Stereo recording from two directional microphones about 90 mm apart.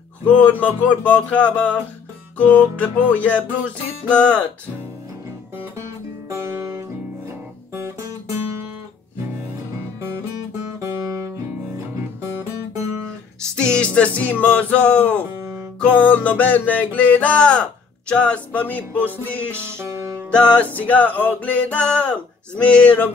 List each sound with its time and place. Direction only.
0.2 s music: 15° left (ahead or behind)
5.8 s music: 30° right (ahead or behind)
10.8 s music: 35° right (ahead or behind)
13.6 s music: 10° left (ahead or behind)
20.5 s music: 15° left (ahead or behind)